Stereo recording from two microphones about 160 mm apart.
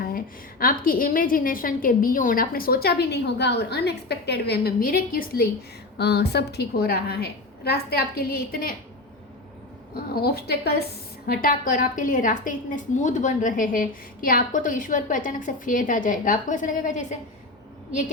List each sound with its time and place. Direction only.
0.6 s a woman's voice: 60° left (ahead or behind)
6.0 s a woman's voice: 90° left; by 8.7 s 70° left (ahead or behind)
9.9 s a woman's voice: 75° left (ahead or behind)
11.3 s a woman's voice: 65° left (ahead or behind)